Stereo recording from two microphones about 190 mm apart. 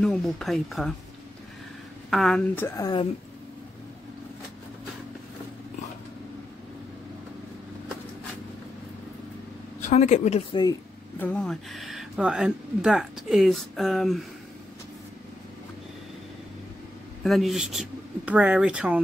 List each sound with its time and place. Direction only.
0.0 s speech: 5° left (ahead or behind)
2.0 s speech: centre (ahead or behind)
9.8 s speech: 40° left (ahead or behind)
10.5 s speech: 20° left (ahead or behind)
11.2 s speech: 5° left (ahead or behind)
17.2 s speech: centre (ahead or behind)